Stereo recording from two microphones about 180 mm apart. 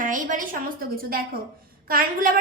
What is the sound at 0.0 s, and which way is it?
A woman's voice, 45° right (ahead or behind).